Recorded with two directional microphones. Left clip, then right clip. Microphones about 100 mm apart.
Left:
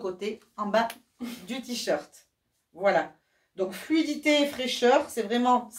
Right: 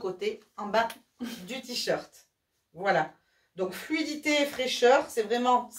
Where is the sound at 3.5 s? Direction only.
20° left (ahead or behind).